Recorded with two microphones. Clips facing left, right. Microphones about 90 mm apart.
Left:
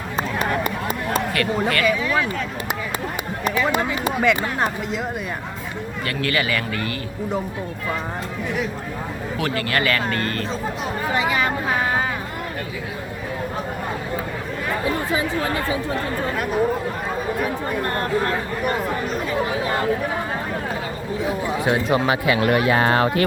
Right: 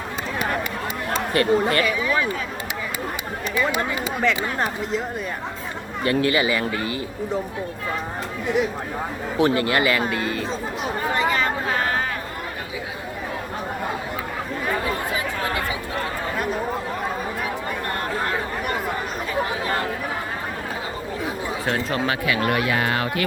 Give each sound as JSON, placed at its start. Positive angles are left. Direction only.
{"t": 1.3, "sound": "speech", "side_deg": -30}
{"t": 1.8, "sound": "speech", "side_deg": 0}
{"t": 3.6, "sound": "speech", "side_deg": 0}
{"t": 6.1, "sound": "speech", "side_deg": -20}
{"t": 9.4, "sound": "speech", "side_deg": -20}
{"t": 11.1, "sound": "speech", "side_deg": 5}
{"t": 21.6, "sound": "speech", "side_deg": 10}